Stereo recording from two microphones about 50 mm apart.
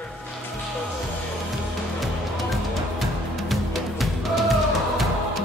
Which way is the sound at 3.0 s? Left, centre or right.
Centre.